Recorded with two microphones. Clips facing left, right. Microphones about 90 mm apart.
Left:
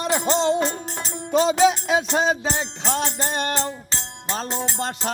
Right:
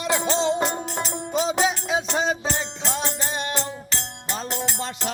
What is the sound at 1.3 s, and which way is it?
Music, 85° left.